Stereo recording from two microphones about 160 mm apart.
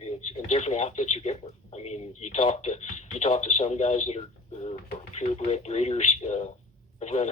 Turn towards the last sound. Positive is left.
turn(degrees=45)  # may be behind; listen again after turning